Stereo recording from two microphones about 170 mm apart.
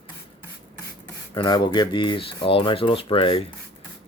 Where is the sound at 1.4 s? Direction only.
25° left (ahead or behind).